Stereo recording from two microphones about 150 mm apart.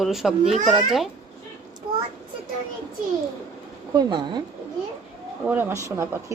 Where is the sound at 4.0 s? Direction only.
30° right (ahead or behind).